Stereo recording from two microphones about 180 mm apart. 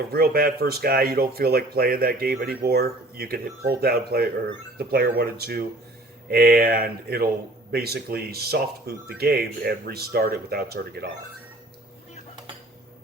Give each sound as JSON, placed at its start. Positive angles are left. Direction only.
{"t": 0.1, "sound": "speech", "side_deg": -55}